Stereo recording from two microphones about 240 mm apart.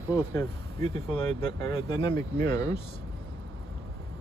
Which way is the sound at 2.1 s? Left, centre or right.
Right.